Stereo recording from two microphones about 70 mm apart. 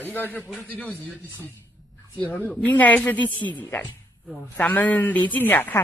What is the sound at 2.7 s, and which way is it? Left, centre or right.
Speech, left.